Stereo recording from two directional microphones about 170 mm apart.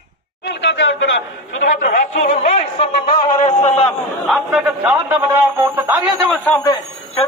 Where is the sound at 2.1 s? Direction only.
40° left (ahead or behind).